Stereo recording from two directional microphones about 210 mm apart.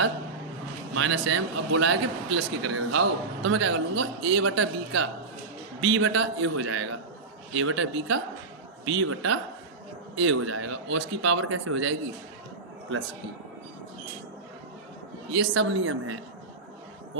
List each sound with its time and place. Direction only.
0.9 s a man's voice: 70° right (ahead or behind)
8.8 s a man's voice: 80° right
15.4 s a man's voice: 70° right (ahead or behind)